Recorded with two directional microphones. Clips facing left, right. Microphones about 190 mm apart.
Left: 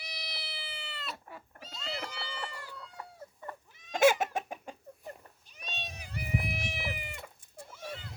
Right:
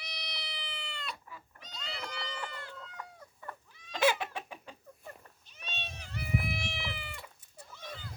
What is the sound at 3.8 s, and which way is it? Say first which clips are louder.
Chicken: left 5 dB; 45° left (ahead or behind).